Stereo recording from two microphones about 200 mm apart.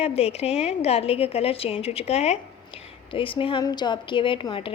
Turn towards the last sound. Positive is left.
turn(degrees=25)  # may be behind; listen again after turning